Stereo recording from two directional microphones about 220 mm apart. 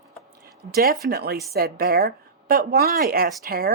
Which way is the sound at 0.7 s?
45° right (ahead or behind).